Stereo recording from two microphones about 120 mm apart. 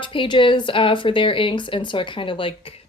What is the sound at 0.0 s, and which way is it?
Speech, 45° left (ahead or behind).